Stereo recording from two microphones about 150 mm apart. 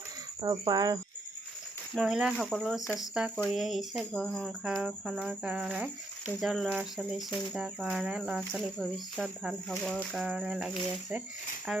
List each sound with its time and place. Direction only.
0.4 s cricket: 25° right (ahead or behind)
1.9 s speech: centre (ahead or behind)
11.7 s speech: 5° right (ahead or behind)